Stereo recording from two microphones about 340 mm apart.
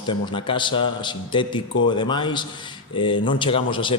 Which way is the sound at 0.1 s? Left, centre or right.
Centre.